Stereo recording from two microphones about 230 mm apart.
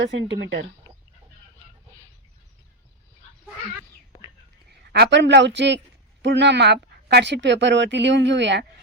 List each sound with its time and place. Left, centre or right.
0.0 s a woman's voice: right
4.7 s a woman's voice: right